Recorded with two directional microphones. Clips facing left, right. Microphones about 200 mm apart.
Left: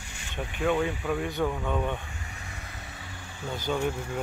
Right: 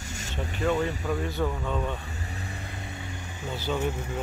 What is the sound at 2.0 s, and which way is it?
Vehicle, 35° right (ahead or behind).